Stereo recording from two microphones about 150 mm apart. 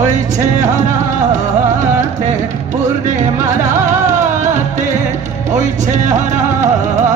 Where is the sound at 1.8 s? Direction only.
55° right (ahead or behind).